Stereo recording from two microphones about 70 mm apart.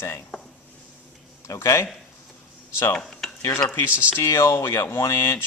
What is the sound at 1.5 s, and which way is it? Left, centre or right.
Speech, left.